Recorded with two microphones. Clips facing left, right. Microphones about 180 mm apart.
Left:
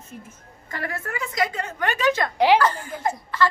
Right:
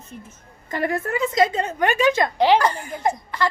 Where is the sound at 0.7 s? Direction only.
20° right (ahead or behind).